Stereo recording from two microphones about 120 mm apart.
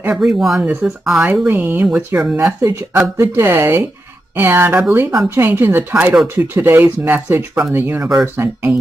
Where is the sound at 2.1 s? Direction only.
20° right (ahead or behind).